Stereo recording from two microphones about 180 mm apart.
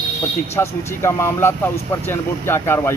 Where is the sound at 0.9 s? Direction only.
15° left (ahead or behind).